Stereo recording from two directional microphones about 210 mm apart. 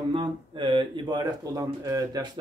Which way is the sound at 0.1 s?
25° right (ahead or behind).